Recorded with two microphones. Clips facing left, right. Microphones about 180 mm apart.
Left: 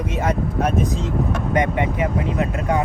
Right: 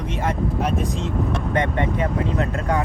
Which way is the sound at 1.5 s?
15° left (ahead or behind).